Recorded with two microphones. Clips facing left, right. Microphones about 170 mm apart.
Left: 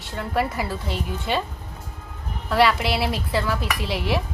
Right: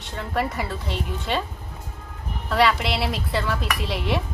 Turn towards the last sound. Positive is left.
turn(degrees=0)  # may be behind; listen again after turning